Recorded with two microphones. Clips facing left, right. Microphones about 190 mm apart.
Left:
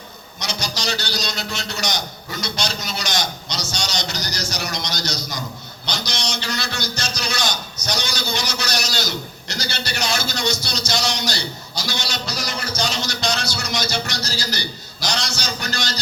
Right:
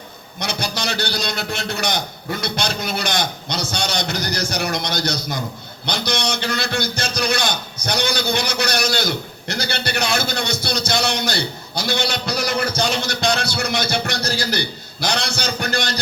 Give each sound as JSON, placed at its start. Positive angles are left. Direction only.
{"t": 0.3, "sound": "a man's voice", "side_deg": -55}